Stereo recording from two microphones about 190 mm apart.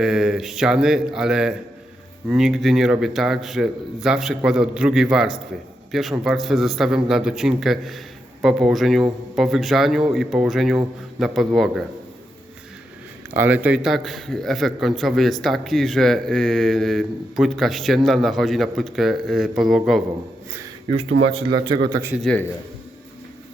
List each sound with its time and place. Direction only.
0.0 s a man's voice: 5° right (ahead or behind)
13.3 s a man's voice: 10° right (ahead or behind)
21.8 s speech: 20° right (ahead or behind)
22.1 s a man's voice: 5° left (ahead or behind)